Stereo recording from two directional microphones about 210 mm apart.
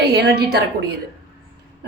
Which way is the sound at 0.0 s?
50° right (ahead or behind).